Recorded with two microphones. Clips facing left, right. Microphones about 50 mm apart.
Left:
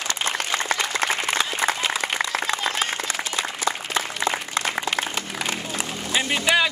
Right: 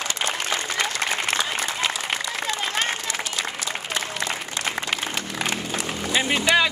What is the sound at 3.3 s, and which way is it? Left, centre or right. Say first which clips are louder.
Applause: left 3 dB; left.